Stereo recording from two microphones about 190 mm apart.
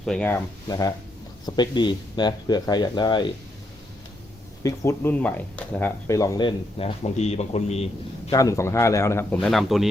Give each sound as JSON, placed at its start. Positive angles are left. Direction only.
{"t": 0.0, "sound": "speech", "side_deg": 5}
{"t": 0.7, "sound": "speech", "side_deg": 20}
{"t": 4.6, "sound": "speech", "side_deg": 15}
{"t": 8.3, "sound": "speech", "side_deg": 15}